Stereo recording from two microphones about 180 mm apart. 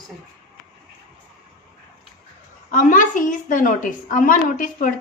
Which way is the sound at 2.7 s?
45° left (ahead or behind).